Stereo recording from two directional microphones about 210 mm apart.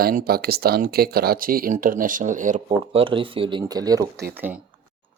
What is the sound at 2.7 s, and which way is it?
Speech, 25° right (ahead or behind).